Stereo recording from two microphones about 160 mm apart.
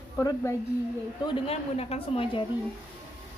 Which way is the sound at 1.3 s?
40° left (ahead or behind).